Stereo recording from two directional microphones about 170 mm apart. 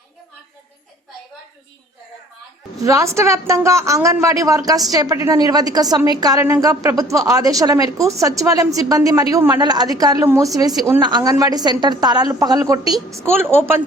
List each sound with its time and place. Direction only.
2.8 s a woman's voice: 15° right (ahead or behind)